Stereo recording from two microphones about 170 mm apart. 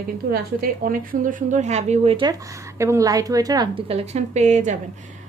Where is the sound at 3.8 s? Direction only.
40° right (ahead or behind).